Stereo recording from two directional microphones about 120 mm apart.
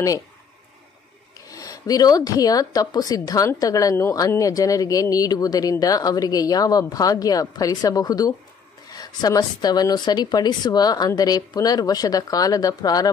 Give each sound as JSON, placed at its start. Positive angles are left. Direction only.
{"t": 1.5, "sound": "a woman's voice", "side_deg": 30}